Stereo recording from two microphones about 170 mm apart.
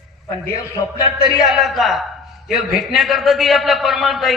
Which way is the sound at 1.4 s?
Centre (ahead or behind).